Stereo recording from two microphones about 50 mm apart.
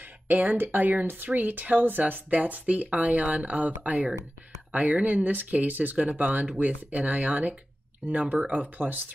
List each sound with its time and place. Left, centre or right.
0.7 s speech: right